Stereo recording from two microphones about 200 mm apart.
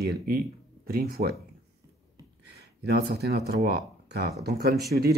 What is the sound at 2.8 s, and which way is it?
Speech, 55° right (ahead or behind).